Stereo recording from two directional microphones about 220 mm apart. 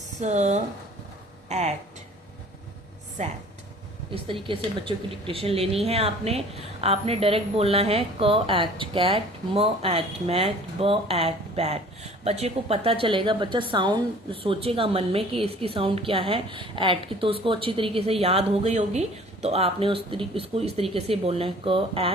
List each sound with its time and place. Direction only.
0.2 s speech: 30° right (ahead or behind)
4.1 s a woman's voice: 25° right (ahead or behind)